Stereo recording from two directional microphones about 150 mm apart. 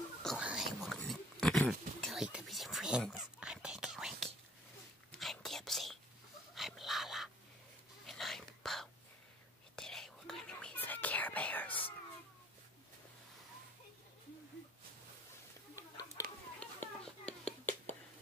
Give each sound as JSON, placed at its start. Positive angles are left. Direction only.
{"t": 0.4, "sound": "a sound", "side_deg": -5}
{"t": 3.0, "sound": "whispering", "side_deg": 0}
{"t": 6.5, "sound": "dog", "side_deg": 0}
{"t": 8.1, "sound": "whispering", "side_deg": 0}
{"t": 15.7, "sound": "chicken", "side_deg": 20}
{"t": 16.5, "sound": "a sound", "side_deg": 10}